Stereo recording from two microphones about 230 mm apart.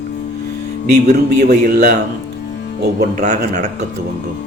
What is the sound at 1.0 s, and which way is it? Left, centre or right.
Speech, right.